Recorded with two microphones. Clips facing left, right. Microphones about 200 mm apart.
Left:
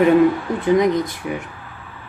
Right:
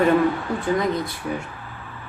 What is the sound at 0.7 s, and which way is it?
Speech, 20° left (ahead or behind).